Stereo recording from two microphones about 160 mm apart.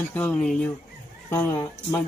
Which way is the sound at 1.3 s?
20° left (ahead or behind).